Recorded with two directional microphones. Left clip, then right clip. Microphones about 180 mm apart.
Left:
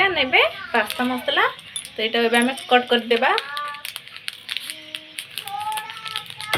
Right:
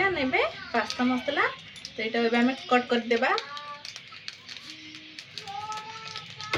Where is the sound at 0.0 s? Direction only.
20° right (ahead or behind).